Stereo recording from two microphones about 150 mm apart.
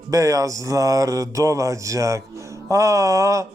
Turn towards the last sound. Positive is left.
turn(degrees=-20)  # may be behind; listen again after turning